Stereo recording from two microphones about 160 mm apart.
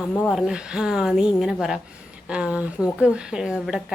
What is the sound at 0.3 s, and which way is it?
A woman's voice, 5° right (ahead or behind).